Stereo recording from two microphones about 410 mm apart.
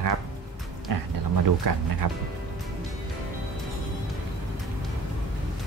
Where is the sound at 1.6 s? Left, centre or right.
Right.